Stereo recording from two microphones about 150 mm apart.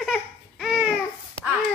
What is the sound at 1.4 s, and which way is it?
Babbling, 35° left (ahead or behind).